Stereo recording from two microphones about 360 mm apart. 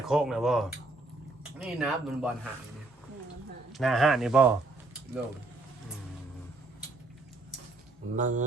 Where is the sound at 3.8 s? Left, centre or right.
Centre.